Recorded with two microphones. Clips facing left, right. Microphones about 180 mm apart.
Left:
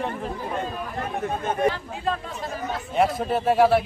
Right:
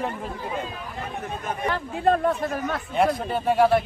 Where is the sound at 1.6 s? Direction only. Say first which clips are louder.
Right 7 dB; 55° right (ahead or behind).